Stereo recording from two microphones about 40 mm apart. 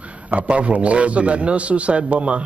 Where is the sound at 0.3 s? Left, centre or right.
Right.